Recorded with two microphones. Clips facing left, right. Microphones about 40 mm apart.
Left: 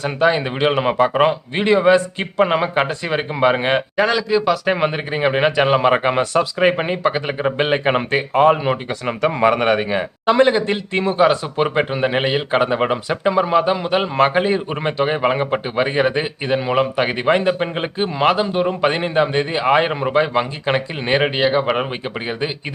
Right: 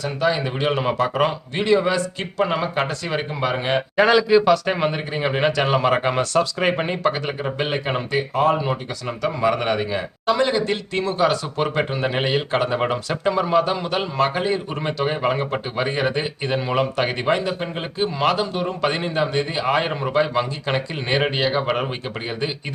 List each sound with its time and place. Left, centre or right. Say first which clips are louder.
0.0 s a man's voice: left 4 dB; left
3.9 s speech: right 7 dB; centre
4.5 s speech: left 2 dB; centre
7.4 s a man's voice: left 8 dB; left
14.2 s a man's voice: left 4 dB; left
17.3 s a man's voice: left 5 dB; left; by 21.8 s centre